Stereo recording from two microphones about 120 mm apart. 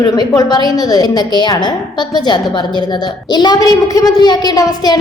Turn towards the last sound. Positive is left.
turn(degrees=35)  # may be behind; listen again after turning